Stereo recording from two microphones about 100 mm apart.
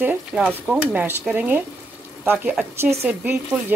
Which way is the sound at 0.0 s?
15° right (ahead or behind).